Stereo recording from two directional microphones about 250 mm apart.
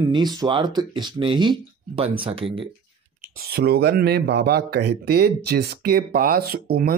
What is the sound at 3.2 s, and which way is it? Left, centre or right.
Speech, right.